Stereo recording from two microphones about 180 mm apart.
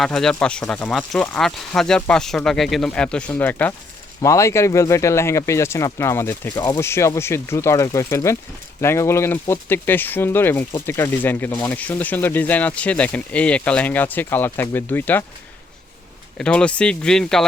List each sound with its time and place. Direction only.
0.0 s speech: 5° left (ahead or behind)
16.4 s speech: 5° left (ahead or behind)